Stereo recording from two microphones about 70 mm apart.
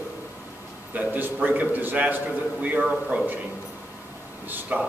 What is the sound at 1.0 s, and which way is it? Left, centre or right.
A man's voice, right.